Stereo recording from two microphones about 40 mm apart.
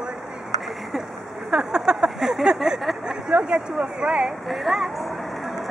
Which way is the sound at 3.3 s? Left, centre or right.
Right.